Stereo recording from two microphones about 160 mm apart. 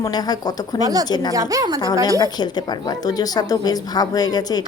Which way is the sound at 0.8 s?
25° right (ahead or behind).